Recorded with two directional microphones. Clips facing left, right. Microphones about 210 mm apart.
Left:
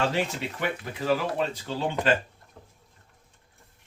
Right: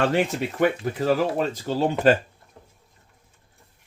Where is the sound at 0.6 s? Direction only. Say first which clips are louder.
Right 9 dB; 45° right (ahead or behind).